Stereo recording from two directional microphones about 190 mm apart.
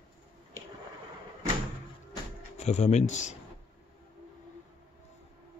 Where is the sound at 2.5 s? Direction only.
35° left (ahead or behind).